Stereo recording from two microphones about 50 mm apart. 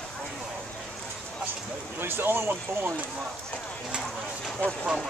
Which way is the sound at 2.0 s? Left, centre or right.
Right.